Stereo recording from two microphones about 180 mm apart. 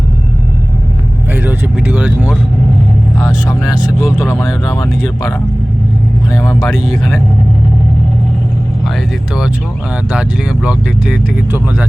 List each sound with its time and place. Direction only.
1.3 s speech: 10° right (ahead or behind)
3.5 s speech: 20° left (ahead or behind)
3.8 s speech: 5° right (ahead or behind)
4.2 s speech: 15° left (ahead or behind)
6.3 s speech: 15° left (ahead or behind)
6.6 s speech: centre (ahead or behind)
10.1 s speech: 5° right (ahead or behind)